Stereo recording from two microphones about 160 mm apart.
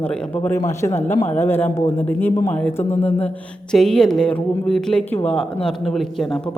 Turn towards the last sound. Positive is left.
turn(degrees=5)  # may be behind; listen again after turning